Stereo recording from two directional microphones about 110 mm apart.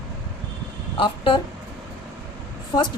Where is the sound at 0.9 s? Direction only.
50° left (ahead or behind).